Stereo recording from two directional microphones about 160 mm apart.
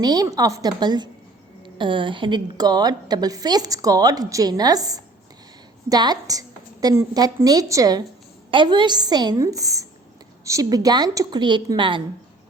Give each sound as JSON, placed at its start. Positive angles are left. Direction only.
{"t": 0.0, "sound": "a woman's voice", "side_deg": -25}